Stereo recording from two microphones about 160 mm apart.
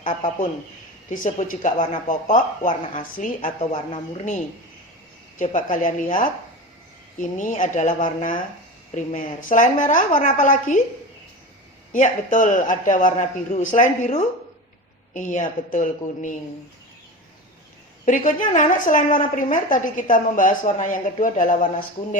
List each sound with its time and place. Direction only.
1.1 s a woman's voice: 55° left (ahead or behind)
5.4 s a woman's voice: 50° left (ahead or behind)
11.9 s a man's voice: 55° left (ahead or behind)
18.0 s a woman's voice: 55° left (ahead or behind)